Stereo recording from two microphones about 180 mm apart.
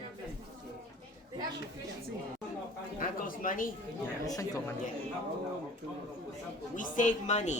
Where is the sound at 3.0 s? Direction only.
50° left (ahead or behind).